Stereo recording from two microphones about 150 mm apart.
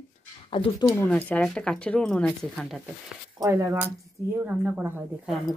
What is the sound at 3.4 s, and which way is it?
Speech, 20° right (ahead or behind).